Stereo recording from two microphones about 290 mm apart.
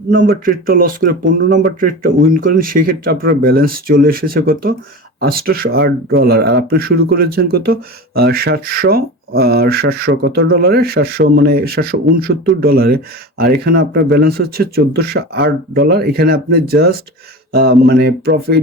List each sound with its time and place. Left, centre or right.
0.1 s speech: right